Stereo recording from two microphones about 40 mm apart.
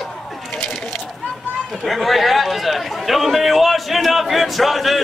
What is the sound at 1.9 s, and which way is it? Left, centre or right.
A man's voice, centre.